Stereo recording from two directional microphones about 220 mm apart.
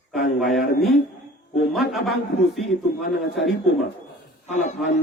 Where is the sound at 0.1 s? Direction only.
Centre (ahead or behind).